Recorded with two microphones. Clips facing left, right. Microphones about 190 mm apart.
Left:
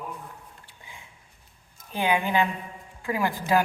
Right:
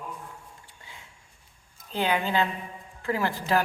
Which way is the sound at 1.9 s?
15° left (ahead or behind).